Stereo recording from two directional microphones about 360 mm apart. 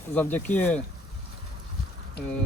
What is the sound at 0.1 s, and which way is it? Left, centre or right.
Speech, centre.